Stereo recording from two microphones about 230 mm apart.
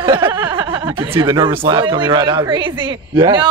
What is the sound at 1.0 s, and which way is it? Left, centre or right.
Speech, centre.